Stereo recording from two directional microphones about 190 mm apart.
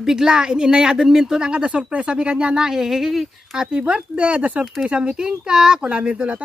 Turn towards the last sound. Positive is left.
turn(degrees=-5)  # may be behind; listen again after turning